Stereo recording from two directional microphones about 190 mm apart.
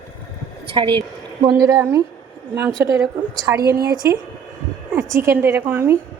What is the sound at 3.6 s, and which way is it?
Speech, 55° right (ahead or behind).